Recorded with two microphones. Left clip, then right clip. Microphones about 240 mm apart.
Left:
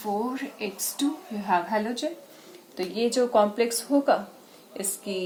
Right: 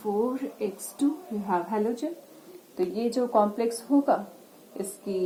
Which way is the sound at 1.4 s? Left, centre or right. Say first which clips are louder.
Left 2 dB; left.